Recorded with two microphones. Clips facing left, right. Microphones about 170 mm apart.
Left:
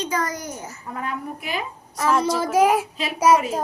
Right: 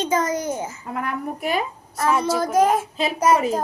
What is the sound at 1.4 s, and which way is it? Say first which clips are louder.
Speech: right 6 dB; 45° right (ahead or behind).